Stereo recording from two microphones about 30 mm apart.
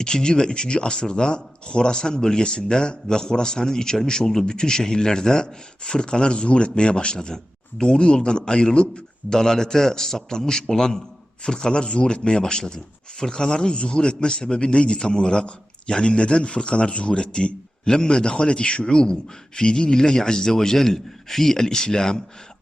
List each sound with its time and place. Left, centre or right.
0.0 s speech: left
9.3 s speech: left